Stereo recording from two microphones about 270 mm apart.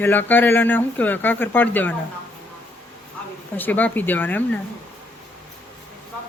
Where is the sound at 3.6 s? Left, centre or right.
Centre.